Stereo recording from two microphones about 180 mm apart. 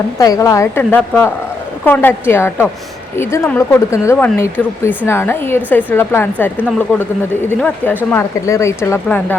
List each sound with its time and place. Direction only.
0.2 s speech: 20° left (ahead or behind)